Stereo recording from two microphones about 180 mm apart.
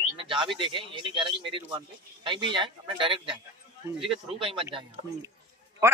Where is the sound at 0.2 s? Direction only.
30° right (ahead or behind).